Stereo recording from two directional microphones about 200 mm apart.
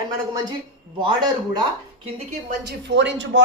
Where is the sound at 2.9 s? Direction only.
65° right (ahead or behind).